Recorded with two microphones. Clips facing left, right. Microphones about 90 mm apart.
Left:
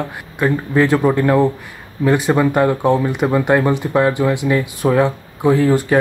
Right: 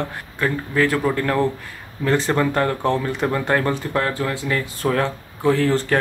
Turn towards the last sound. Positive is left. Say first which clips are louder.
# left 4 dB
turn(degrees=10)  # may be behind; listen again after turning